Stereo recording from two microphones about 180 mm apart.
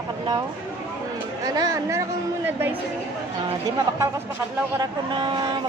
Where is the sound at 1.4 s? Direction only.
20° right (ahead or behind).